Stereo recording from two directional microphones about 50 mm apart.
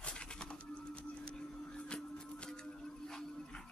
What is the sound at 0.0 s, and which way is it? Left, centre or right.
Printer, centre.